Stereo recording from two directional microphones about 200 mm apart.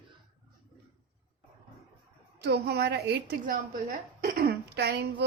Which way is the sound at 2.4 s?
55° right (ahead or behind).